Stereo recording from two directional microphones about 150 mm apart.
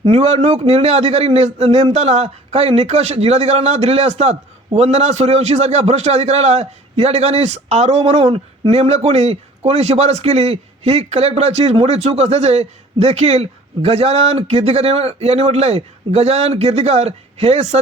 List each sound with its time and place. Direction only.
0.0 s a man's voice: 45° right (ahead or behind)